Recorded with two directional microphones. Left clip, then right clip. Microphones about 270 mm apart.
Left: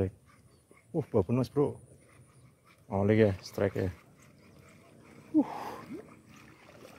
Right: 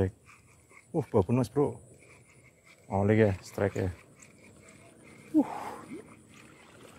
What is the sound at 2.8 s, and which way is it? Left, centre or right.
Speech, centre.